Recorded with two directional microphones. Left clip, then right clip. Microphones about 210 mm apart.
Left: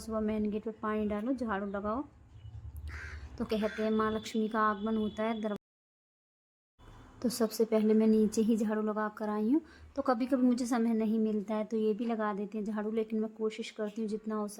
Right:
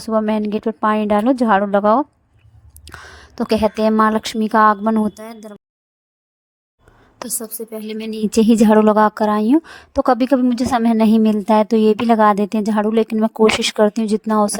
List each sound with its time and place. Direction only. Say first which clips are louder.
0.0 s a woman's voice: right 16 dB; 45° right (ahead or behind)
3.3 s a woman's voice: right 17 dB; 45° right (ahead or behind)
5.1 s a woman's voice: even; centre (ahead or behind)
7.3 s a woman's voice: even; centre (ahead or behind)
8.1 s a woman's voice: right 13 dB; 45° right (ahead or behind)